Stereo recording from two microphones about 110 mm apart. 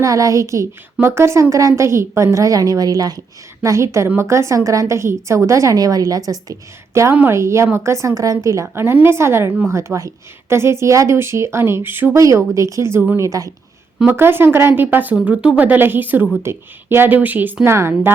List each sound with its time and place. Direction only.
0.0 s a woman's voice: 30° right (ahead or behind)
7.1 s a woman's voice: 20° right (ahead or behind)